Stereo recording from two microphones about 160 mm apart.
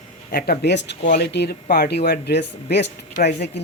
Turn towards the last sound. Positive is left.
turn(degrees=45)  # may be behind; listen again after turning